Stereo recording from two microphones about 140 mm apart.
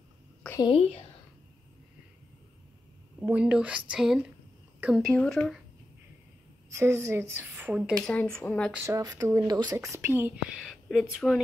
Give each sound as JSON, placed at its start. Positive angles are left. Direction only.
{"t": 0.7, "sound": "a woman's voice", "side_deg": 45}
{"t": 3.3, "sound": "a woman's voice", "side_deg": -10}
{"t": 6.7, "sound": "a woman's voice", "side_deg": -20}
{"t": 8.1, "sound": "speech", "side_deg": 10}
{"t": 8.8, "sound": "speech", "side_deg": -25}